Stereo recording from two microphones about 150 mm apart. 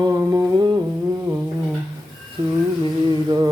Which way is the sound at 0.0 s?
25° right (ahead or behind).